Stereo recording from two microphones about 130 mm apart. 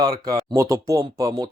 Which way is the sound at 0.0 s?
30° right (ahead or behind).